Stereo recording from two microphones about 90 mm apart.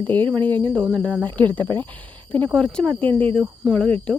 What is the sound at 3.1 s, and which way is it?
Speech, 90° right.